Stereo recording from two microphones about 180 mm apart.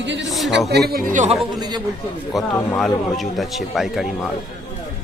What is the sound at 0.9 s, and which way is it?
Speech, 55° right (ahead or behind).